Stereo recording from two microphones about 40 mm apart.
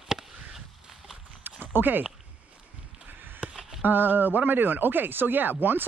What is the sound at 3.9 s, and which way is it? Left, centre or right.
Speech, right.